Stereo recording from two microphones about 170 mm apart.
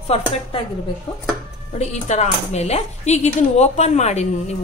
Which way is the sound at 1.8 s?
40° left (ahead or behind).